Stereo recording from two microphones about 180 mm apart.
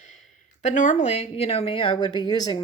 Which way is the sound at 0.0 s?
40° left (ahead or behind).